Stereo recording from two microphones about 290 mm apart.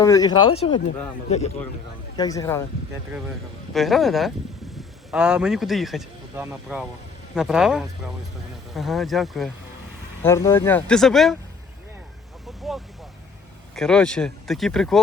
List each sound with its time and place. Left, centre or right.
0.0 s speech: centre
2.1 s speech: centre
3.8 s a man's voice: centre
12.6 s speech: centre